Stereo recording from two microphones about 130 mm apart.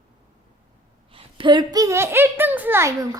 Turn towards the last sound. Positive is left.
turn(degrees=-25)  # may be behind; listen again after turning